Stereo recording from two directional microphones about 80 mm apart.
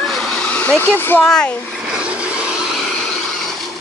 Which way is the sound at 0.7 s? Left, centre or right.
Left.